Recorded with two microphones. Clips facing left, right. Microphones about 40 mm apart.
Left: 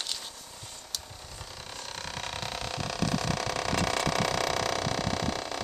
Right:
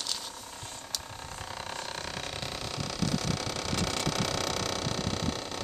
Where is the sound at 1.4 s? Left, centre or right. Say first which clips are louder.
Right 5 dB; right.